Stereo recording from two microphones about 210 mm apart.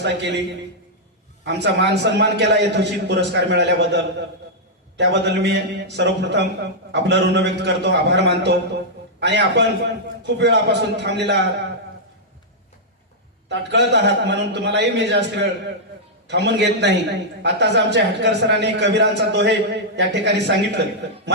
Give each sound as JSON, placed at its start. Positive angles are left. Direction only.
{"t": 0.0, "sound": "speech", "side_deg": -55}
{"t": 1.5, "sound": "a man's voice", "side_deg": -55}
{"t": 13.5, "sound": "speech", "side_deg": -55}